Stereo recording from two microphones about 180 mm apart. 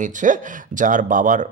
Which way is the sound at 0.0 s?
45° right (ahead or behind).